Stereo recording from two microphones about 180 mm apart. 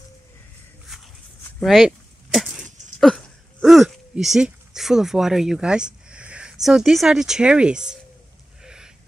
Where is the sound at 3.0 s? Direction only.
Centre (ahead or behind).